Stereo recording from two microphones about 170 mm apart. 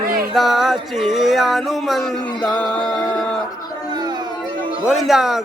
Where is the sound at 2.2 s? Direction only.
25° left (ahead or behind).